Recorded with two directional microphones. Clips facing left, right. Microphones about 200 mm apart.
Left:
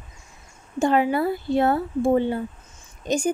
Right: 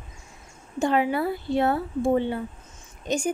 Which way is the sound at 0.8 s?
45° left (ahead or behind).